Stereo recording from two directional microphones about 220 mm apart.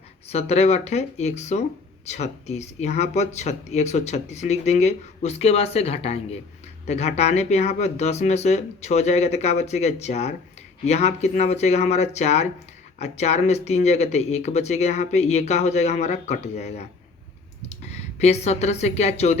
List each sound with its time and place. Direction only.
0.3 s speech: 30° left (ahead or behind)